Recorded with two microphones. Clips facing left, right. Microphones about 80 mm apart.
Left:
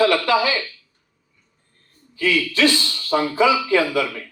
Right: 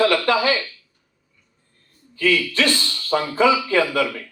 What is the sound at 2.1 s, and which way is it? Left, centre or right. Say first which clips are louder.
A man's voice: right 1 dB; right.